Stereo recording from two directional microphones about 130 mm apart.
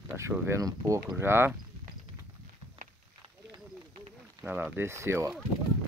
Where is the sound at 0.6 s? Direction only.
25° right (ahead or behind).